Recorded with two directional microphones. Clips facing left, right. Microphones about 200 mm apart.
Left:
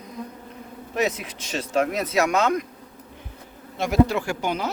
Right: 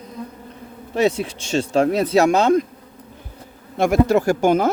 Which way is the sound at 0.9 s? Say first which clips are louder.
Right 6 dB; 30° right (ahead or behind).